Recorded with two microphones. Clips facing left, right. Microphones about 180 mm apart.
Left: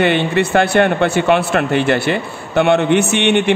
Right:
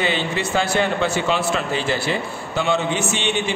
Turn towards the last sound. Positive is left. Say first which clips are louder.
# left 8 dB
turn(degrees=65)  # may be behind; listen again after turning